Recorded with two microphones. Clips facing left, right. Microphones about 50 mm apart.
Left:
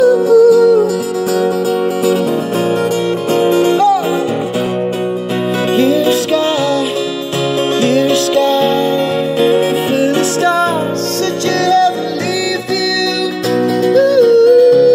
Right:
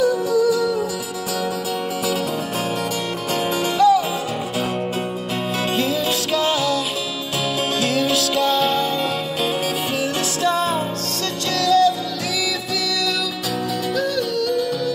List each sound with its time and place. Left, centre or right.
0.0 s music: left
3.3 s music: left
5.8 s music: left
7.8 s music: left
10.4 s music: left
13.8 s music: left